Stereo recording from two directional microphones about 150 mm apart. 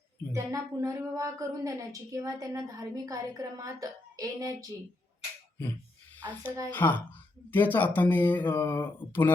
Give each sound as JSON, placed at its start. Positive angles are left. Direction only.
{"t": 0.3, "sound": "speech", "side_deg": -20}
{"t": 6.7, "sound": "speech", "side_deg": 10}